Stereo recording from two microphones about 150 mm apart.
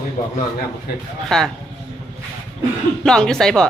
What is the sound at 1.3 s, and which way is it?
Speech, 5° left (ahead or behind).